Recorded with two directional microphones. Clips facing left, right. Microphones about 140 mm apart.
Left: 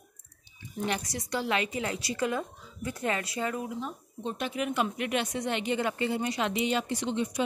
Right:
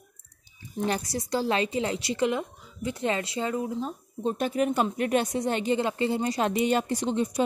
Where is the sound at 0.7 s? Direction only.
35° right (ahead or behind).